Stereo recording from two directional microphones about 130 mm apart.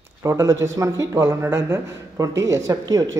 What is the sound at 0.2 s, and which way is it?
Speech, 25° right (ahead or behind).